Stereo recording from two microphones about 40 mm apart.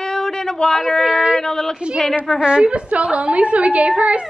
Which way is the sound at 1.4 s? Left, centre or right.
Centre.